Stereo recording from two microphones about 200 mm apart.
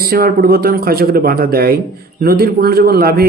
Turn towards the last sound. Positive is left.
turn(degrees=-50)  # may be behind; listen again after turning